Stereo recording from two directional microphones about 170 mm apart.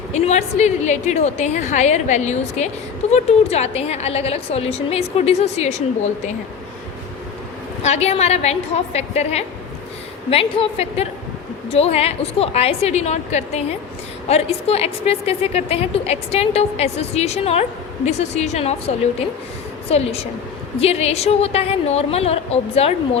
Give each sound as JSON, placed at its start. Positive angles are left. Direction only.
{"t": 0.1, "sound": "a woman's voice", "side_deg": 40}
{"t": 7.8, "sound": "a woman's voice", "side_deg": 40}
{"t": 19.9, "sound": "a woman's voice", "side_deg": 35}